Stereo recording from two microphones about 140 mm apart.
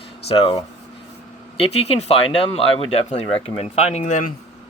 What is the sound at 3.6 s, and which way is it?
Speech, 55° left (ahead or behind).